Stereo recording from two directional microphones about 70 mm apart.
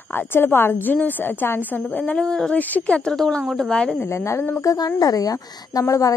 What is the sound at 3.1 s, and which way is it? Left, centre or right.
Speech, centre.